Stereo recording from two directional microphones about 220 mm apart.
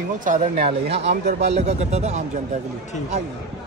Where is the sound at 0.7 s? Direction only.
25° right (ahead or behind).